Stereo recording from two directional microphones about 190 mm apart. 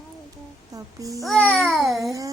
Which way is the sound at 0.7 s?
20° right (ahead or behind).